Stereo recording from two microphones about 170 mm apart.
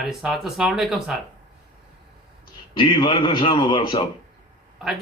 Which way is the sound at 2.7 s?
30° left (ahead or behind).